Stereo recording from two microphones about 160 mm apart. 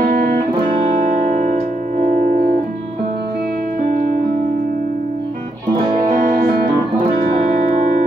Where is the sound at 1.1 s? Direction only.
45° right (ahead or behind).